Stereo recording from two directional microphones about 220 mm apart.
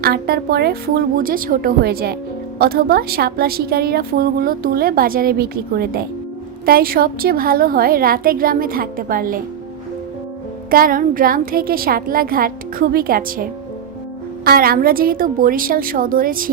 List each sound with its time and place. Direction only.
0.0 s a woman's voice: 45° right (ahead or behind)
10.7 s a woman's voice: 40° right (ahead or behind)